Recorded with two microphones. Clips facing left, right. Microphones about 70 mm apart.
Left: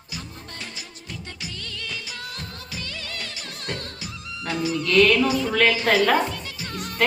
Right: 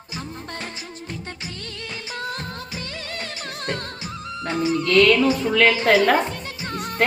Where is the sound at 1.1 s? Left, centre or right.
Right.